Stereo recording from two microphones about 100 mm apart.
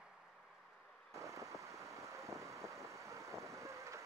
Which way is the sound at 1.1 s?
30° right (ahead or behind).